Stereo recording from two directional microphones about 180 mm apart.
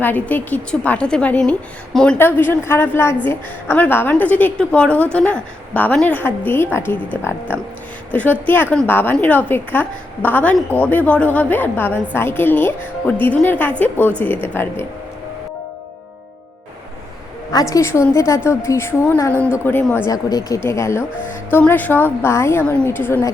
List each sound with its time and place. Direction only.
0.0 s a woman's voice: 10° left (ahead or behind)
17.5 s a woman's voice: 20° left (ahead or behind)